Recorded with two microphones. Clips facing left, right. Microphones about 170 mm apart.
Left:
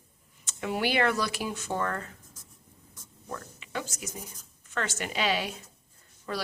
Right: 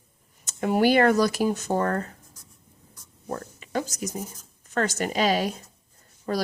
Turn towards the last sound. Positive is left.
turn(degrees=-40)  # may be behind; listen again after turning